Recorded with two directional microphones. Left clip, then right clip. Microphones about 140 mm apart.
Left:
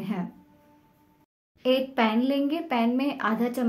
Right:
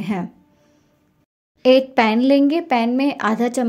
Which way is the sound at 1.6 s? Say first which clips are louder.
Right 10 dB; 55° right (ahead or behind).